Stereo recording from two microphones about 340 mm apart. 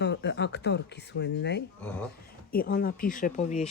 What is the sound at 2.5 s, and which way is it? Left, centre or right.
Speech, left.